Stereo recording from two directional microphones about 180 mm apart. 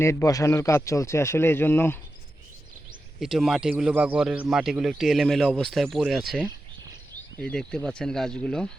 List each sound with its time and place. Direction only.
0.0 s speech: 15° left (ahead or behind)
3.2 s speech: centre (ahead or behind)